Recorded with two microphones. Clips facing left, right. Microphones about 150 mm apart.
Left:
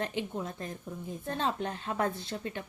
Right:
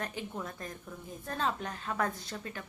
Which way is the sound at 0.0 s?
20° left (ahead or behind).